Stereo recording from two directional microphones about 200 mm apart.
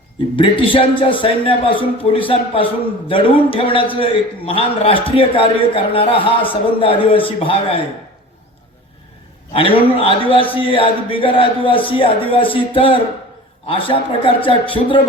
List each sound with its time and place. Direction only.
0.3 s a man's voice: 25° left (ahead or behind)
9.5 s a man's voice: 25° left (ahead or behind)